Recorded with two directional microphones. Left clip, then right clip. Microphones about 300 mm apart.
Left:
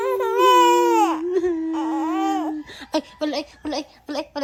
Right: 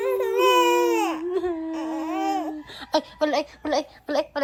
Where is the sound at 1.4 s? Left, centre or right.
Centre.